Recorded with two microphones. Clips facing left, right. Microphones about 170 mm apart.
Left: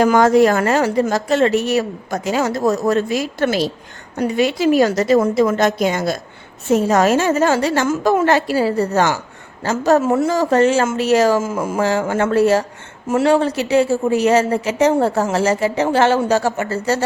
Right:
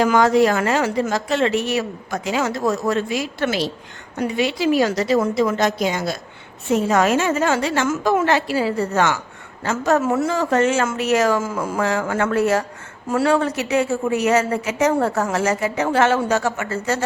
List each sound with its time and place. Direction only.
0.0 s a woman's voice: 45° left (ahead or behind)
6.7 s a woman's voice: 40° left (ahead or behind)